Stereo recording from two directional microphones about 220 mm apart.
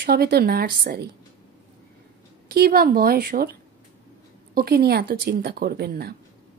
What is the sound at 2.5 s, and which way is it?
Speech, 45° right (ahead or behind).